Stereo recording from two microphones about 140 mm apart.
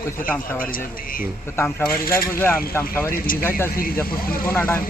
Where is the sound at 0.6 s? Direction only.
90° left.